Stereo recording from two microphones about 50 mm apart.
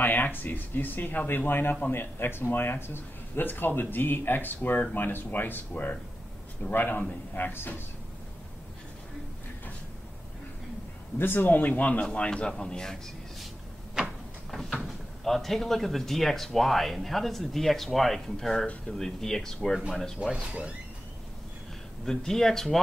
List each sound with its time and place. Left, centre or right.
0.0 s speech: left
6.7 s speech: left
11.1 s a man's voice: left; by 13.0 s centre
14.7 s speech: centre
22.0 s speech: centre